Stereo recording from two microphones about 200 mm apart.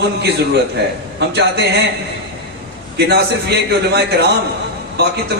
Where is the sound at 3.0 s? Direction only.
55° right (ahead or behind).